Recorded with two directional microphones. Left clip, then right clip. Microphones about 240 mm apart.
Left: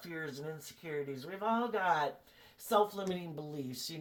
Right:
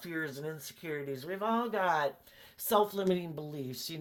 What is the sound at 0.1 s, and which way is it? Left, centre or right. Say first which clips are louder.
Speech: right 4 dB; right.